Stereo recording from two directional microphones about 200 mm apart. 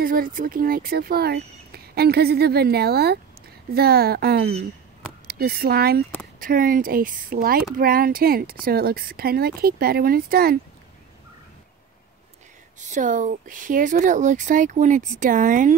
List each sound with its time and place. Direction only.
0.0 s speech: 45° right (ahead or behind)
12.8 s speech: 40° right (ahead or behind)